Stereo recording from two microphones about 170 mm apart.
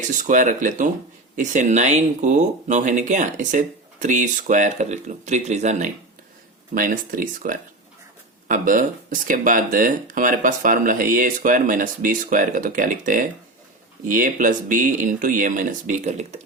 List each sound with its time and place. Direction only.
0.1 s speech: 50° right (ahead or behind)